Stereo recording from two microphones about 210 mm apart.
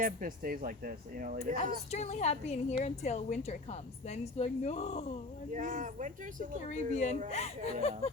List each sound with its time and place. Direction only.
0.0 s speech: 40° right (ahead or behind)
1.9 s a woman's voice: 35° left (ahead or behind)
5.5 s speech: 40° right (ahead or behind)
6.7 s a woman's voice: 35° left (ahead or behind)